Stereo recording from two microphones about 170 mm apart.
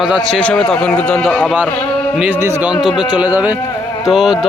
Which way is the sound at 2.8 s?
Centre (ahead or behind).